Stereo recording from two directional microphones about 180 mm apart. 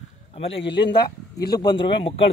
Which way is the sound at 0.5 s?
80° left.